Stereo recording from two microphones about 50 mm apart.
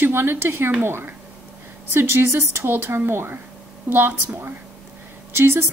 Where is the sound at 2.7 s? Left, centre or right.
Right.